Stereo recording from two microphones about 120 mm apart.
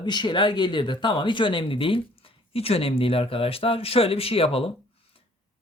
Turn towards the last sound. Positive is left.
turn(degrees=50)  # may be behind; listen again after turning